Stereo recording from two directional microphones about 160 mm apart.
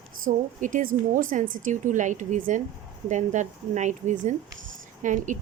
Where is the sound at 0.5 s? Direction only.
55° right (ahead or behind).